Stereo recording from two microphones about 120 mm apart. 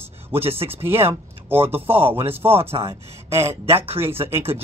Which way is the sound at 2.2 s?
55° right (ahead or behind).